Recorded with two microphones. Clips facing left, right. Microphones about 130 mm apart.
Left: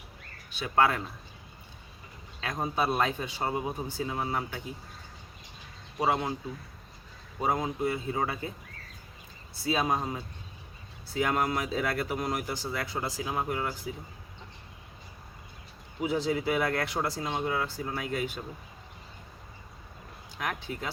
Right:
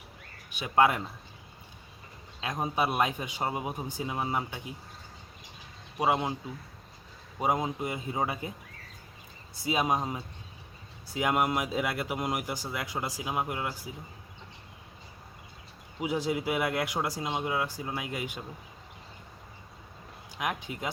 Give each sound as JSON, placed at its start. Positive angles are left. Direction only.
{"t": 0.5, "sound": "speech", "side_deg": -15}
{"t": 2.4, "sound": "speech", "side_deg": -15}
{"t": 6.0, "sound": "speech", "side_deg": -15}
{"t": 7.3, "sound": "speech", "side_deg": -15}
{"t": 9.6, "sound": "speech", "side_deg": -15}
{"t": 16.0, "sound": "speech", "side_deg": -15}
{"t": 20.4, "sound": "speech", "side_deg": -15}